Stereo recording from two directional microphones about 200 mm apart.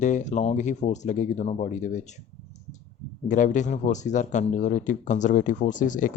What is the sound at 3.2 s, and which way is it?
Speech, 40° left (ahead or behind).